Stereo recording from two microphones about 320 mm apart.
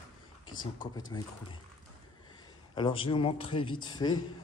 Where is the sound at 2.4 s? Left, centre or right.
Centre.